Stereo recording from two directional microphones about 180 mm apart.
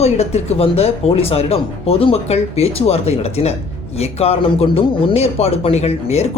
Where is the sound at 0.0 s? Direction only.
35° left (ahead or behind).